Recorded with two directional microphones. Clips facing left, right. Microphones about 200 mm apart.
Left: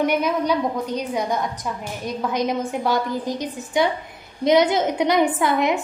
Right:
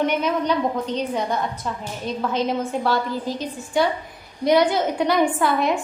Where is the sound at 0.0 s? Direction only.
10° left (ahead or behind).